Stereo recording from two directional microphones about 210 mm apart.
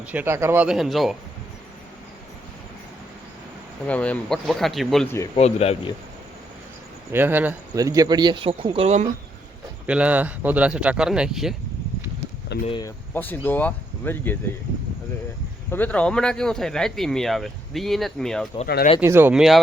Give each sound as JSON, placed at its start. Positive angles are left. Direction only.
{"t": 0.1, "sound": "speech", "side_deg": -10}
{"t": 3.8, "sound": "speech", "side_deg": 5}
{"t": 5.4, "sound": "speech", "side_deg": 30}
{"t": 7.1, "sound": "speech", "side_deg": -10}
{"t": 9.8, "sound": "speech", "side_deg": -5}
{"t": 12.6, "sound": "speech", "side_deg": 25}
{"t": 13.1, "sound": "speech", "side_deg": 10}
{"t": 15.7, "sound": "speech", "side_deg": 5}
{"t": 18.9, "sound": "speech", "side_deg": -10}